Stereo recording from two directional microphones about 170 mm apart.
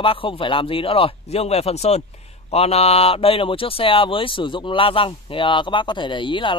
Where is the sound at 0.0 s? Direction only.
30° left (ahead or behind).